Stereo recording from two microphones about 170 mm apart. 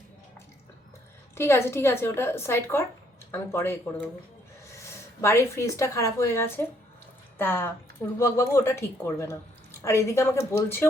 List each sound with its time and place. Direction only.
1.4 s a woman's voice: 15° left (ahead or behind)